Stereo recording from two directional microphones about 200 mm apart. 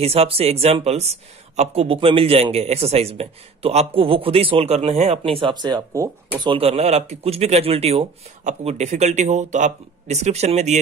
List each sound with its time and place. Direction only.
0.0 s a man's voice: 30° right (ahead or behind)